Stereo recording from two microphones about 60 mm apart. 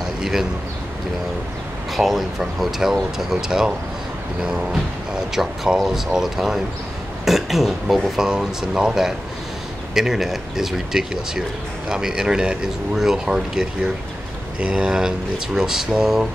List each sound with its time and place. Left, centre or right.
0.2 s speech: centre
2.0 s speech: centre
5.3 s speech: centre